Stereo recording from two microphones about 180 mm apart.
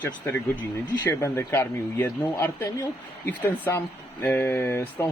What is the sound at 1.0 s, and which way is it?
Speech, 15° left (ahead or behind).